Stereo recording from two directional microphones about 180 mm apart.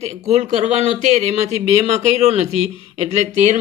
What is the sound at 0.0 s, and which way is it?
Speech, 40° right (ahead or behind).